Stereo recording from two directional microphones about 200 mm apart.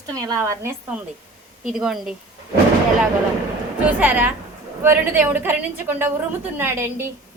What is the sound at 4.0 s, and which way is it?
A woman's voice, 10° right (ahead or behind).